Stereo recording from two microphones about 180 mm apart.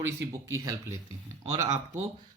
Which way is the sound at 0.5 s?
20° right (ahead or behind).